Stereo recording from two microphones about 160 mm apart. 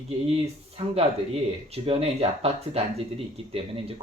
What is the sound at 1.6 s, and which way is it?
Speech, 35° right (ahead or behind).